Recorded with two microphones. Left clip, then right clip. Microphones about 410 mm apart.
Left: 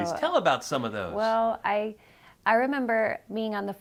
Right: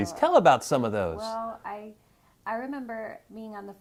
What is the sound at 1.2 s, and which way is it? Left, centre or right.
A woman's voice, left.